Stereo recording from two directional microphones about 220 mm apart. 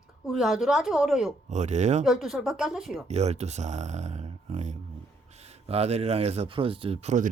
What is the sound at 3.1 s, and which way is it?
Speech, 30° right (ahead or behind).